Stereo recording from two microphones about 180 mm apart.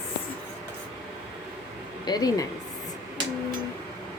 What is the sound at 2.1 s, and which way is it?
Speech, 20° left (ahead or behind).